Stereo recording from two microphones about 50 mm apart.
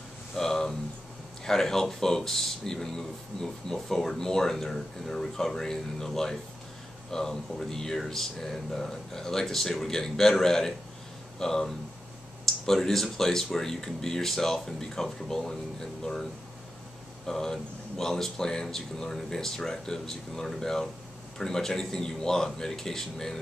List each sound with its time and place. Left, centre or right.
0.4 s a sound: centre
1.4 s speech: centre
17.3 s speech: centre